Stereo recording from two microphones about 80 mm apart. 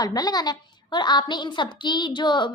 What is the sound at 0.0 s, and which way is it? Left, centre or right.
A woman's voice, left.